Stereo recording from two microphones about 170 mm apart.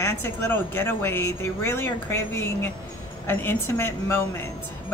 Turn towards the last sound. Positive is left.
turn(degrees=15)  # may be behind; listen again after turning